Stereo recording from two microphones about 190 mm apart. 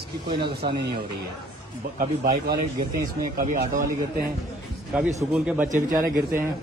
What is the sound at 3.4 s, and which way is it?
Speech, 40° right (ahead or behind).